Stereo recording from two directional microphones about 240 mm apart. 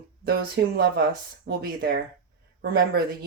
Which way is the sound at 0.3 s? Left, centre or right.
Right.